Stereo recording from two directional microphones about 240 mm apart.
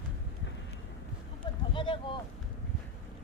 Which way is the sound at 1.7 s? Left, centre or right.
Left.